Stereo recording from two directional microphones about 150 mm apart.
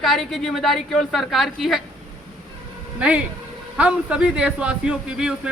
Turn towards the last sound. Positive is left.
turn(degrees=-5)  # may be behind; listen again after turning